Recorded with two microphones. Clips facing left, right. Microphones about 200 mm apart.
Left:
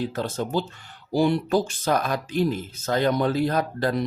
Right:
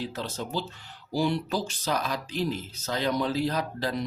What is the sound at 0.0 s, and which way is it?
Speech, 50° left (ahead or behind).